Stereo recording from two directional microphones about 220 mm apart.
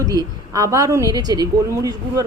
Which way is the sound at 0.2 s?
15° right (ahead or behind).